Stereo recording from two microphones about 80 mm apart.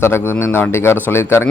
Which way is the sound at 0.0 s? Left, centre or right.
Left.